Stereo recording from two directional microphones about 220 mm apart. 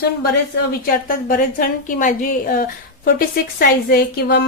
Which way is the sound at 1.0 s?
40° left (ahead or behind).